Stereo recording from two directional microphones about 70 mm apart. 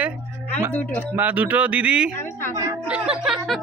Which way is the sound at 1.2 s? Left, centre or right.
Right.